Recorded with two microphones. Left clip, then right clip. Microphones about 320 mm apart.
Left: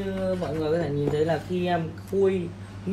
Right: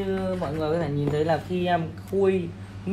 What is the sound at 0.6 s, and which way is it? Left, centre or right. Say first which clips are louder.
Speech: even; right.